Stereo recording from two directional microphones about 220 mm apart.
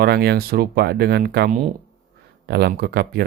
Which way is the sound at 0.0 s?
45° right (ahead or behind).